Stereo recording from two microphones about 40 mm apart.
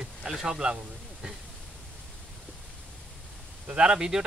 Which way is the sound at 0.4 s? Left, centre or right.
Right.